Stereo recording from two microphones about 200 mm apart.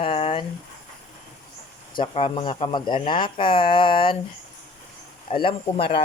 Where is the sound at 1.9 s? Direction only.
25° left (ahead or behind).